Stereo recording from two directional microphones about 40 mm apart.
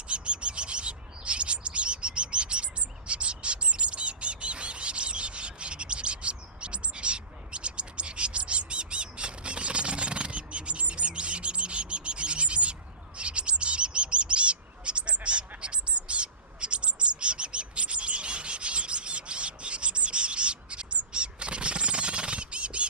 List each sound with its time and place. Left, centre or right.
0.1 s bird: right